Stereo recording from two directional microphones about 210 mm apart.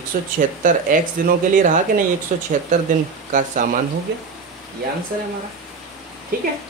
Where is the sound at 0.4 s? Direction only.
40° right (ahead or behind).